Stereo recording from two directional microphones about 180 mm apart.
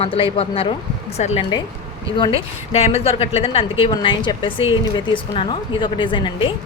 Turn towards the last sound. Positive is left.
turn(degrees=25)  # may be behind; listen again after turning